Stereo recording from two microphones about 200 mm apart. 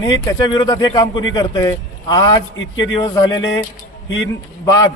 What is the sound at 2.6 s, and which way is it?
Speech, 70° left (ahead or behind).